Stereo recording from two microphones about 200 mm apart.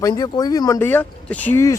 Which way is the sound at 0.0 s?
20° left (ahead or behind).